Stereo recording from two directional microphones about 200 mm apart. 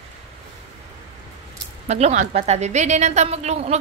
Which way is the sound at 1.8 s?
35° right (ahead or behind).